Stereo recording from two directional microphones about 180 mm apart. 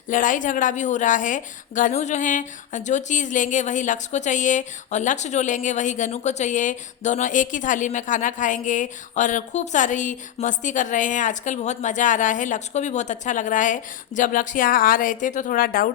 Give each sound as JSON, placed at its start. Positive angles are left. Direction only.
{"t": 0.1, "sound": "a woman's voice", "side_deg": 45}